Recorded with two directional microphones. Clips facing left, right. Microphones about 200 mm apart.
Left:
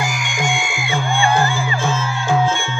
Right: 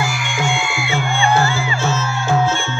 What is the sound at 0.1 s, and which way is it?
Music, 40° left (ahead or behind).